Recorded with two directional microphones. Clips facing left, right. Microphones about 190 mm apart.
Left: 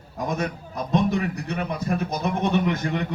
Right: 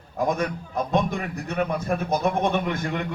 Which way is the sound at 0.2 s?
50° right (ahead or behind).